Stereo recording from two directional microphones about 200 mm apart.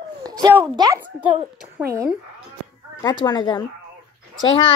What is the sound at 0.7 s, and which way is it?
Speech, 20° right (ahead or behind).